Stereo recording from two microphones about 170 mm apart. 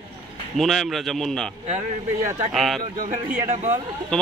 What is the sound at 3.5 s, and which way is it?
Speech, 40° right (ahead or behind).